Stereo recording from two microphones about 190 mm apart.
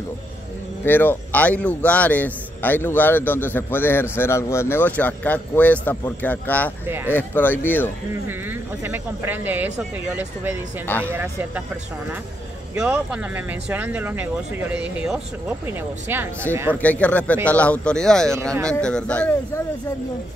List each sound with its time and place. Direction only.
0.8 s a man's voice: 10° left (ahead or behind)
6.9 s speech: 10° right (ahead or behind)
7.2 s a man's voice: 10° left (ahead or behind)
8.1 s speech: 10° right (ahead or behind)
16.8 s a man's voice: 10° left (ahead or behind)